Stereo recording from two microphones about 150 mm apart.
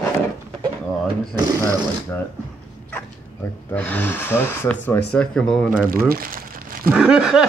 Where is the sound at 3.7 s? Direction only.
10° left (ahead or behind).